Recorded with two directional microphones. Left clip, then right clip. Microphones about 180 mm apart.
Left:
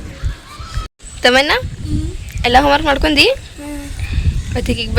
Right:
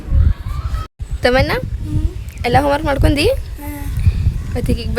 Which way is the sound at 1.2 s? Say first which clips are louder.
Left 3 dB; centre (ahead or behind).